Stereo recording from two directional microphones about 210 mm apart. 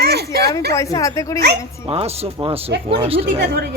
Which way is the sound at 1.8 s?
30° right (ahead or behind).